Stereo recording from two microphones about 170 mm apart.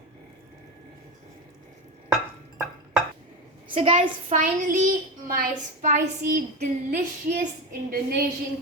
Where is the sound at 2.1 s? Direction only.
5° right (ahead or behind).